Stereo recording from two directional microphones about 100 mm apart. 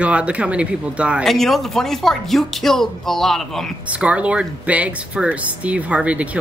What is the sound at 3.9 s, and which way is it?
Speech, 10° right (ahead or behind).